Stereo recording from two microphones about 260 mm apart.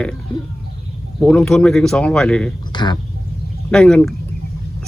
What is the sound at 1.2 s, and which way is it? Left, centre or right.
Speech, centre.